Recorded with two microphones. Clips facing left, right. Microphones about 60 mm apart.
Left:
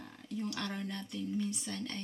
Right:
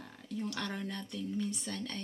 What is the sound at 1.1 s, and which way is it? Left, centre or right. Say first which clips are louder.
Speech: left 1 dB; centre.